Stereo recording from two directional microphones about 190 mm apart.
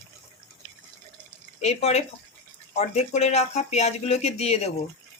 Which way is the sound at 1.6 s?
35° left (ahead or behind).